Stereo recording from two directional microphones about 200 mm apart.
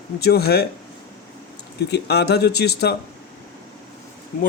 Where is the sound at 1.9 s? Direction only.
55° left (ahead or behind).